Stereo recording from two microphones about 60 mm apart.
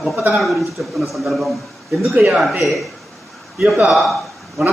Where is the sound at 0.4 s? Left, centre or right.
Centre.